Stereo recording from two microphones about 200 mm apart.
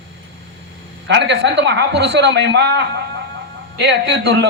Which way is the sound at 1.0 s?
60° right (ahead or behind).